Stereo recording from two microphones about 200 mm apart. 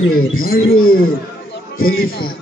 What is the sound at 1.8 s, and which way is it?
Speech, 45° left (ahead or behind).